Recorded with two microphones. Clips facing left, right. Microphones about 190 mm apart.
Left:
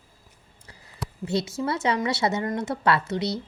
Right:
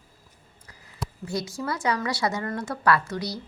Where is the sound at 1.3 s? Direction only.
25° left (ahead or behind).